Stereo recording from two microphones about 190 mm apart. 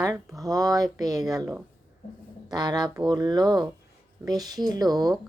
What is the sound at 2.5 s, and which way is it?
Speech, 20° right (ahead or behind).